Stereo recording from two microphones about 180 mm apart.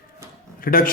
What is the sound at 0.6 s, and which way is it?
Speech, 50° left (ahead or behind).